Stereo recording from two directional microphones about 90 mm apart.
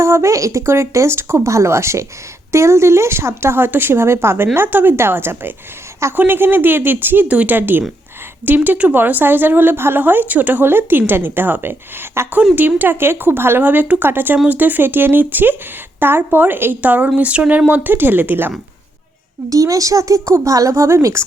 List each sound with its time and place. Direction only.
0.0 s speech: 30° right (ahead or behind)
19.5 s speech: 40° right (ahead or behind)